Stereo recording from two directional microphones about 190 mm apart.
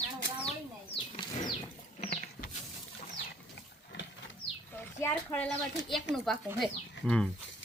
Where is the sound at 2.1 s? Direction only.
45° left (ahead or behind).